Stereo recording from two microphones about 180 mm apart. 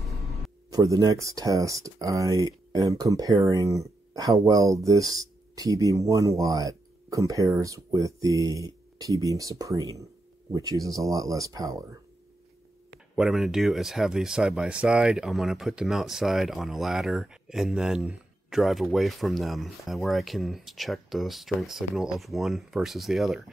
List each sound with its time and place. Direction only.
0.7 s speech: 20° right (ahead or behind)
13.1 s speech: centre (ahead or behind)